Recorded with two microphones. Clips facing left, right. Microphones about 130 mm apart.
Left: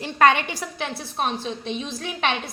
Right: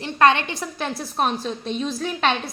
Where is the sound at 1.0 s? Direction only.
45° right (ahead or behind).